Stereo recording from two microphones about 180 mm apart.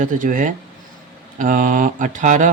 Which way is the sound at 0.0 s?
45° right (ahead or behind).